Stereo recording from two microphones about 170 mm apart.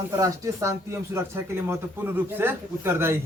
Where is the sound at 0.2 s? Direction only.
20° right (ahead or behind).